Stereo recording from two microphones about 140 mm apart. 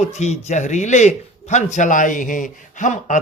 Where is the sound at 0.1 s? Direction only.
55° left (ahead or behind).